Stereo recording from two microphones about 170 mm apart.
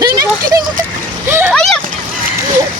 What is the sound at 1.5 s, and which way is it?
Speech, 5° left (ahead or behind).